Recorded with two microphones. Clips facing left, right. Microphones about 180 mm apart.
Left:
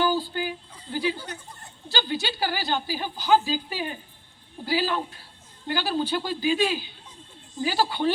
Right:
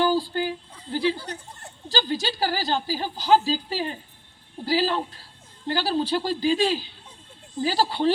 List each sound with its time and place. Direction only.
0.3 s a woman's voice: 35° right (ahead or behind)